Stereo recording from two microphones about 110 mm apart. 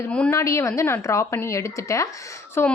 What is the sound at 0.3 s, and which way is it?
A woman's voice, 25° left (ahead or behind).